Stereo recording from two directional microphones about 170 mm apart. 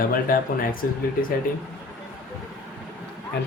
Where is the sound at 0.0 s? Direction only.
55° left (ahead or behind).